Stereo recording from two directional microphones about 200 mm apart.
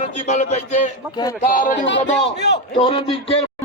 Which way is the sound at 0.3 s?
35° left (ahead or behind).